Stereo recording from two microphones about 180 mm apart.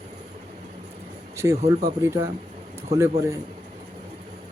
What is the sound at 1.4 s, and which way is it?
Speech, 15° right (ahead or behind).